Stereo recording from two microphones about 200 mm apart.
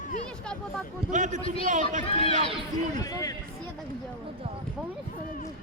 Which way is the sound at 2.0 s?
30° left (ahead or behind).